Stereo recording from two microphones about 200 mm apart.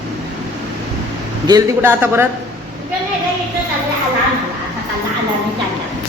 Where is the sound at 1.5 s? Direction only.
15° right (ahead or behind).